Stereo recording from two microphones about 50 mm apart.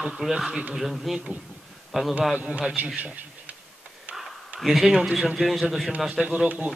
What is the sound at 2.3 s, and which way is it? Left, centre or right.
Speech, right.